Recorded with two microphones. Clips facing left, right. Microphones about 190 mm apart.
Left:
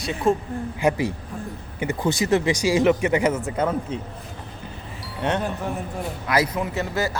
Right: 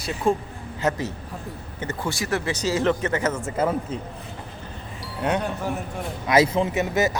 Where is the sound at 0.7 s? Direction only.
10° left (ahead or behind).